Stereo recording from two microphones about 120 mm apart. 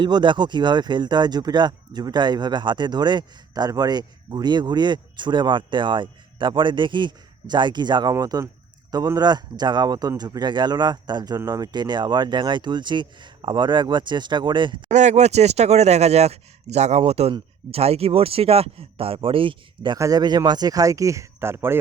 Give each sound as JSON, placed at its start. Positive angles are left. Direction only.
{"t": 0.0, "sound": "speech", "side_deg": -40}
{"t": 14.8, "sound": "speech", "side_deg": -80}
{"t": 20.0, "sound": "speech", "side_deg": -30}